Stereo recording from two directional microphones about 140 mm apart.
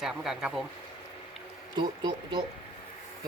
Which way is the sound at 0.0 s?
Centre (ahead or behind).